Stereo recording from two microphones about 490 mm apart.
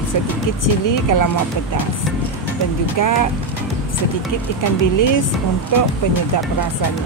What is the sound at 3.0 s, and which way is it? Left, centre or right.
Speech, left.